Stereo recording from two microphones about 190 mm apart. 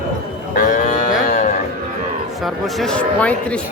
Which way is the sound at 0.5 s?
45° left (ahead or behind).